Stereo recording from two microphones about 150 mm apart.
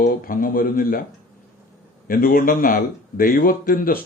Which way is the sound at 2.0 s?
70° left (ahead or behind).